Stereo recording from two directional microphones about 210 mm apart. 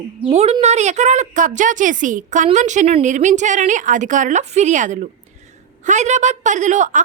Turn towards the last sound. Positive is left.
turn(degrees=-35)  # may be behind; listen again after turning